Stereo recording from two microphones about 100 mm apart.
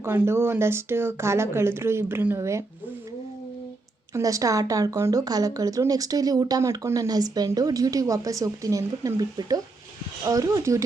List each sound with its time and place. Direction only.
0.0 s speech: 25° right (ahead or behind)
4.1 s speech: 35° right (ahead or behind)